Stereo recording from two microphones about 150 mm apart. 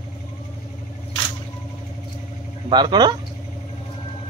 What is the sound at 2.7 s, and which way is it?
Speech, 30° right (ahead or behind).